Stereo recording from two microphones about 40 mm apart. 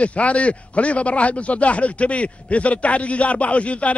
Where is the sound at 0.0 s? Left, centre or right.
Left.